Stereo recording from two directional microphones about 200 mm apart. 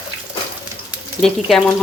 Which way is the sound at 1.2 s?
Centre (ahead or behind).